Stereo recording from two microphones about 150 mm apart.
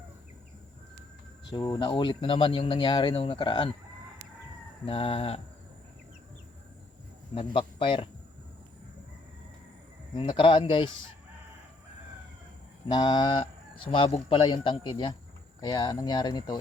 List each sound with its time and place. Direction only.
1.8 s speech: 30° left (ahead or behind)
4.9 s speech: 40° left (ahead or behind)
7.3 s speech: 35° left (ahead or behind)
10.2 s speech: 35° left (ahead or behind)
12.9 s speech: 30° left (ahead or behind)